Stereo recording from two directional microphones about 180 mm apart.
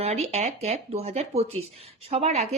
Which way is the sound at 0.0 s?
35° right (ahead or behind).